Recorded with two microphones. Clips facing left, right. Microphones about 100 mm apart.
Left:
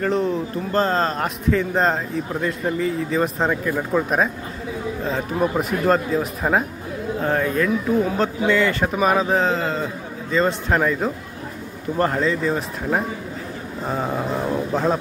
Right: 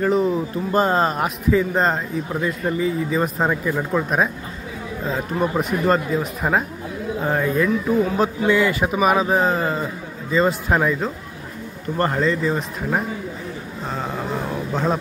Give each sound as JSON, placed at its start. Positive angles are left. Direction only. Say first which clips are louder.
{"t": 0.0, "sound": "a man's voice", "louder": "right 2 dB", "side_deg": -5}